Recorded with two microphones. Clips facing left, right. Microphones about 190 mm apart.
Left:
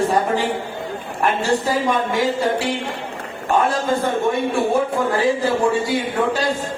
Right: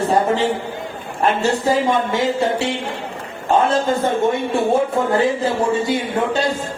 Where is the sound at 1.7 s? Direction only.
25° right (ahead or behind).